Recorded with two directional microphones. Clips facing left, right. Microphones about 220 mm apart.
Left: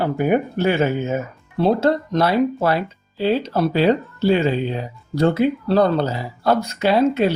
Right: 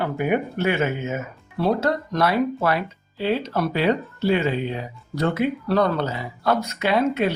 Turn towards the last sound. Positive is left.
turn(degrees=30)  # may be behind; listen again after turning